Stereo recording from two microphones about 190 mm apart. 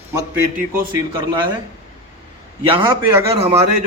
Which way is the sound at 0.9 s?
20° right (ahead or behind).